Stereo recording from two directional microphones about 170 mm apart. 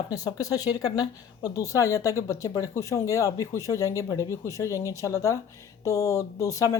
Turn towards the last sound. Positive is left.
turn(degrees=20)  # may be behind; listen again after turning